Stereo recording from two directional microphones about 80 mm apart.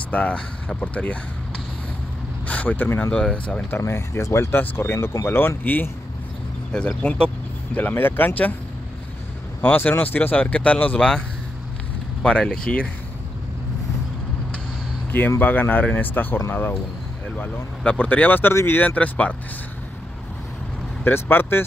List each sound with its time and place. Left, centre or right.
0.1 s speech: centre
2.4 s speech: centre
3.1 s speech: centre
3.7 s speech: left
6.7 s speech: centre
9.6 s speech: left
15.0 s speech: left
18.5 s speech: left
18.8 s speech: left
21.0 s speech: left